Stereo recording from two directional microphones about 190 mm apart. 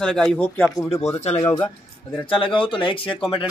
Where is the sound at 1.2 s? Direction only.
35° left (ahead or behind).